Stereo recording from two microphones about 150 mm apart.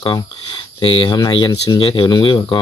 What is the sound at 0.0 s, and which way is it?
Speech, 30° left (ahead or behind).